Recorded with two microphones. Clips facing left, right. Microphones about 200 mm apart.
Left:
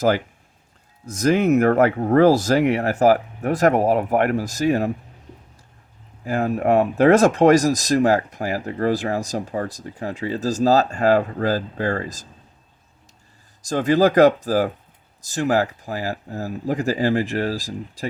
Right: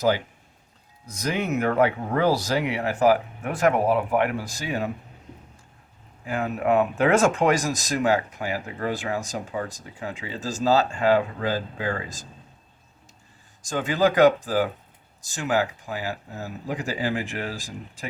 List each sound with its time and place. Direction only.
1.0 s speech: 45° left (ahead or behind)
6.2 s speech: 35° left (ahead or behind)
13.6 s speech: 40° left (ahead or behind)